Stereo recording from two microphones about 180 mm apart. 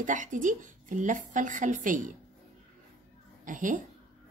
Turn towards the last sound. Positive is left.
turn(degrees=-45)  # may be behind; listen again after turning